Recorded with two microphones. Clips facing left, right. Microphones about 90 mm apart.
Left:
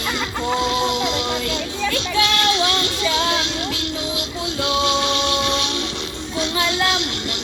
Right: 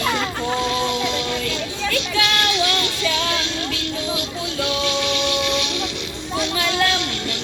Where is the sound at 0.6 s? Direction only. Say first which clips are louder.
Left 2 dB; 20° left (ahead or behind).